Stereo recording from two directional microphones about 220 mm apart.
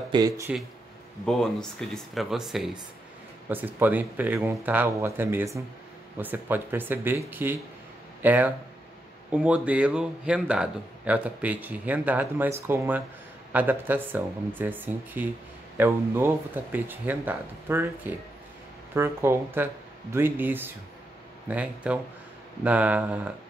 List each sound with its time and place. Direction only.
0.1 s speech: 15° right (ahead or behind)
1.2 s speech: centre (ahead or behind)